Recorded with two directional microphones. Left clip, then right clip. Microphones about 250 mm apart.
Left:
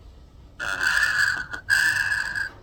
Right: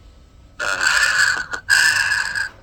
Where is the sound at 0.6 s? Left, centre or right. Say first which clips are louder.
Right 5 dB; right.